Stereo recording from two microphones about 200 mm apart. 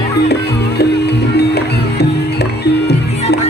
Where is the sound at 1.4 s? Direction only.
55° left (ahead or behind).